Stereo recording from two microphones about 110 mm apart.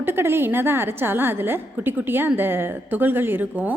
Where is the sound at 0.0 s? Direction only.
20° right (ahead or behind).